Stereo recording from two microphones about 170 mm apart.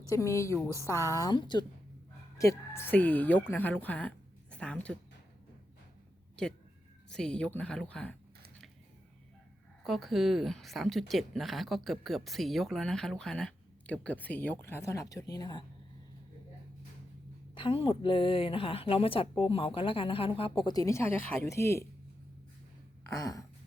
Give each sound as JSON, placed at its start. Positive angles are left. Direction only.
{"t": 0.1, "sound": "a woman's voice", "side_deg": 20}
{"t": 2.4, "sound": "a woman's voice", "side_deg": 15}
{"t": 4.5, "sound": "a sound", "side_deg": 5}
{"t": 6.4, "sound": "speech", "side_deg": 5}
{"t": 9.8, "sound": "speech", "side_deg": 0}
{"t": 17.5, "sound": "a woman's voice", "side_deg": 30}
{"t": 23.1, "sound": "speech", "side_deg": 20}